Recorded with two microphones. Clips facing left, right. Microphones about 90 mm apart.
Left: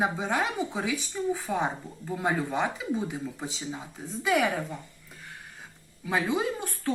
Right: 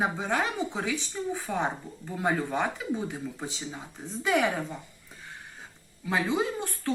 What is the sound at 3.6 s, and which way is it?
A woman's voice, centre (ahead or behind).